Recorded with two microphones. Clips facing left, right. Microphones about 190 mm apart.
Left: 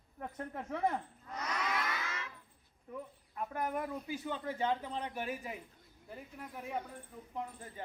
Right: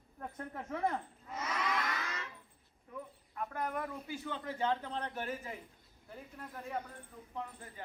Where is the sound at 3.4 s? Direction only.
15° left (ahead or behind).